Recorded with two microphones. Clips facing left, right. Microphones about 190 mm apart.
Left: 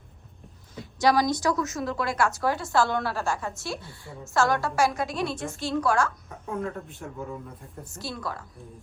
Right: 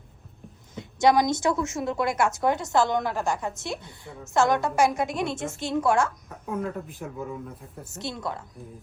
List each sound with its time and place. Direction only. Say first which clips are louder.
0.8 s a woman's voice: right 2 dB; 20° right (ahead or behind)
6.4 s speech: right 1 dB; centre (ahead or behind)
7.9 s a woman's voice: right 2 dB; 20° right (ahead or behind)